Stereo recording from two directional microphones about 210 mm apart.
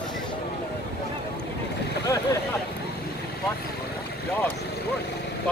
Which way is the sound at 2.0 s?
15° left (ahead or behind).